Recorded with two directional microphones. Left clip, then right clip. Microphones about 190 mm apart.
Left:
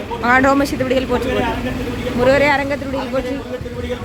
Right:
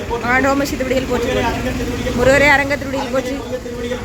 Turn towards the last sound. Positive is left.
turn(degrees=0)  # may be behind; listen again after turning